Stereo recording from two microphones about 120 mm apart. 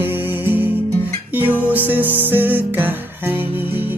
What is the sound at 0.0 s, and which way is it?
Music, 15° right (ahead or behind).